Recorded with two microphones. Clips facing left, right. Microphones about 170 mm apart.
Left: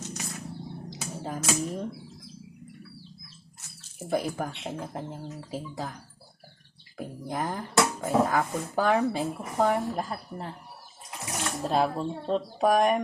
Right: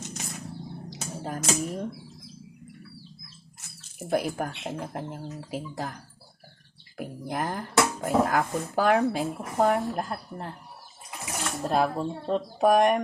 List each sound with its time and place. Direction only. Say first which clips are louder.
0.0 s a sound: left 1 dB; 20° right (ahead or behind)
1.2 s speech: right 1 dB; centre (ahead or behind)
4.1 s speech: right 2 dB; 5° right (ahead or behind)
7.0 s speech: right 1 dB; 5° right (ahead or behind)